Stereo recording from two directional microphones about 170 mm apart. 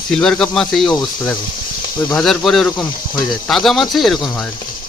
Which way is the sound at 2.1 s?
Centre (ahead or behind).